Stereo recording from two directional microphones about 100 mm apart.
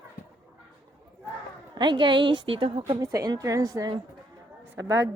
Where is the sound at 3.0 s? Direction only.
35° right (ahead or behind).